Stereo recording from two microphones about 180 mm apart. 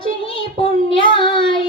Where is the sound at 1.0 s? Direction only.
25° left (ahead or behind).